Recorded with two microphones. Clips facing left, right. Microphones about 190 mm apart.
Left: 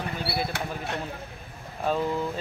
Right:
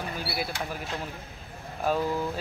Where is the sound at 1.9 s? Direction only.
5° right (ahead or behind).